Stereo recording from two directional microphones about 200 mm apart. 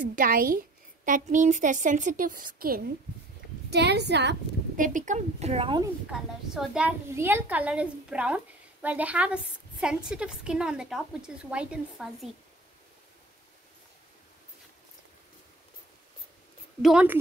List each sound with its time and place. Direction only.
0.1 s a woman's voice: 45° right (ahead or behind)
3.7 s a woman's voice: 55° right (ahead or behind)
4.7 s a woman's voice: 40° right (ahead or behind)
6.5 s a child's voice: 5° right (ahead or behind)
16.8 s a woman's voice: 5° right (ahead or behind)